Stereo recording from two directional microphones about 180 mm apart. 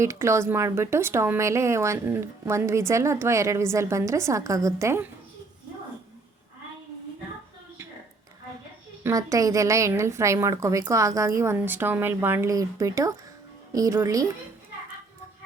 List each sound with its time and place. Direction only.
0.0 s a woman's voice: 15° right (ahead or behind)
9.0 s a woman's voice: 20° right (ahead or behind)